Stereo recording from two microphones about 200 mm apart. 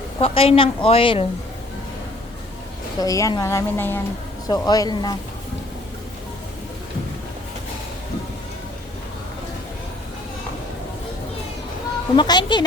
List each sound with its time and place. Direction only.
0.2 s a woman's voice: 30° left (ahead or behind)
3.0 s a woman's voice: 15° left (ahead or behind)
12.1 s a woman's voice: 25° left (ahead or behind)